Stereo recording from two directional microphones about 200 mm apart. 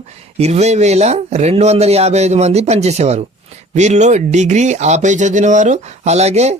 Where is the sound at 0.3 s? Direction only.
35° right (ahead or behind).